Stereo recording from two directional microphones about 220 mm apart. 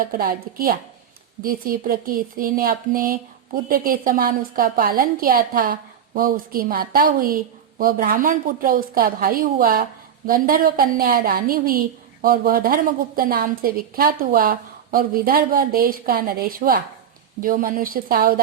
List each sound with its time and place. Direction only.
0.0 s a woman's voice: 40° right (ahead or behind)